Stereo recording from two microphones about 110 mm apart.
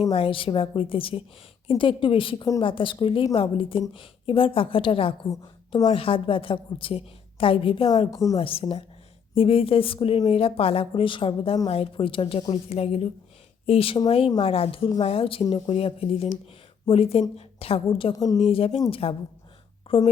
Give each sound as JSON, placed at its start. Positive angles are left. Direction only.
{"t": 0.1, "sound": "a woman's voice", "side_deg": 55}
{"t": 7.9, "sound": "a woman's voice", "side_deg": 35}
{"t": 8.4, "sound": "a woman's voice", "side_deg": 60}
{"t": 14.3, "sound": "a woman's voice", "side_deg": 40}
{"t": 14.5, "sound": "a woman's voice", "side_deg": 60}
{"t": 15.6, "sound": "a woman's voice", "side_deg": 65}
{"t": 18.1, "sound": "a woman's voice", "side_deg": 35}
{"t": 18.4, "sound": "a woman's voice", "side_deg": 60}